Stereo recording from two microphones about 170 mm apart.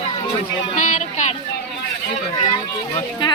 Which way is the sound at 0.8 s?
50° left (ahead or behind).